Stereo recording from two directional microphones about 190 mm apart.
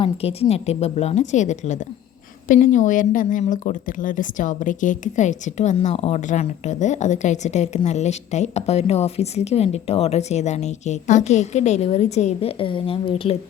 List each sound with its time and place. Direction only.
0.0 s speech: 30° left (ahead or behind)